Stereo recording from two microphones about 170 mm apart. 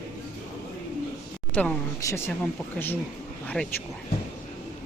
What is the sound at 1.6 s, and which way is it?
Speech, 10° left (ahead or behind).